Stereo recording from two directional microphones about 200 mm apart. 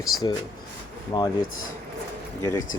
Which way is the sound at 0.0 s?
20° left (ahead or behind).